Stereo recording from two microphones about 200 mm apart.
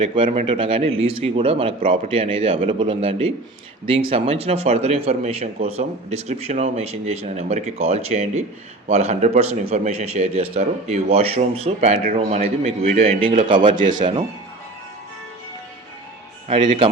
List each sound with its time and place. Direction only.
0.0 s a man's voice: 25° right (ahead or behind)
16.5 s a man's voice: 25° right (ahead or behind)